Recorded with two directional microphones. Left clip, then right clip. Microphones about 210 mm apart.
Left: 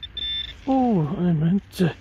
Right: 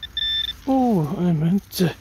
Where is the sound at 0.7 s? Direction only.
5° right (ahead or behind).